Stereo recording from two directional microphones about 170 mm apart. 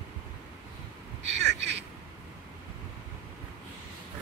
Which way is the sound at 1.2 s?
90° right.